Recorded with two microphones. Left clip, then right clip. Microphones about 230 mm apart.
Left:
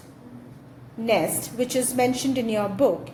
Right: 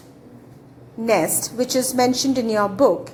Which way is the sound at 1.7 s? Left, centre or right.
Right.